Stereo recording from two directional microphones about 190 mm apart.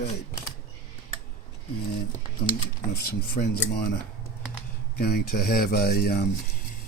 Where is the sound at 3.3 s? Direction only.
55° left (ahead or behind).